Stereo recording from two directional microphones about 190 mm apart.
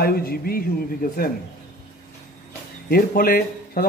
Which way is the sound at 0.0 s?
50° left (ahead or behind).